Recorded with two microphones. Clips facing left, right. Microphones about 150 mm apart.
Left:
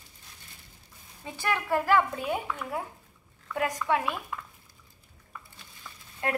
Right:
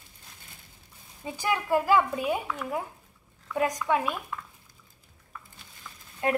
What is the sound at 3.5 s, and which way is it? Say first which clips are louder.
Speech: right 2 dB; 15° right (ahead or behind).